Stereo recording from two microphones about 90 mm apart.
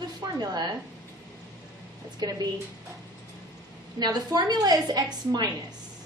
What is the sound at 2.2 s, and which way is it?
Speech, 45° right (ahead or behind).